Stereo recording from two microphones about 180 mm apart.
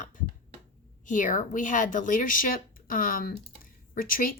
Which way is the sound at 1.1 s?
45° left (ahead or behind).